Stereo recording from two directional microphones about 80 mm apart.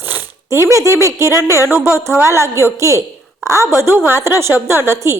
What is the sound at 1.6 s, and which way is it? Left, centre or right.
Speech, right.